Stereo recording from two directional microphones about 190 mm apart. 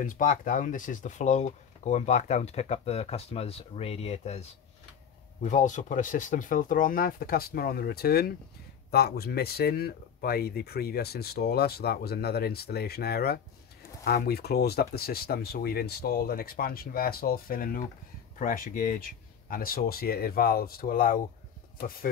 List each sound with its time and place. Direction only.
0.0 s speech: 45° left (ahead or behind)